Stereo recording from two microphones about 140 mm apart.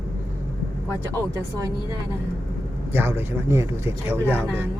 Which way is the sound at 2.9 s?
15° right (ahead or behind).